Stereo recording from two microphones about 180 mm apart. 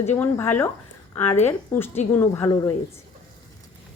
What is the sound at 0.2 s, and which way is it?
Speech, 10° left (ahead or behind).